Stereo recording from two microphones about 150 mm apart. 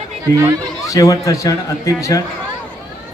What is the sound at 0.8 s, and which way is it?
A man's voice, 20° left (ahead or behind).